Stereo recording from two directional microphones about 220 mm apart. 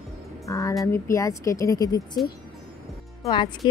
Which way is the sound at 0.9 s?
15° left (ahead or behind).